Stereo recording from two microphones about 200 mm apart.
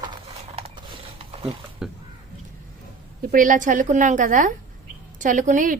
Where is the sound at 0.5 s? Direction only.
30° right (ahead or behind).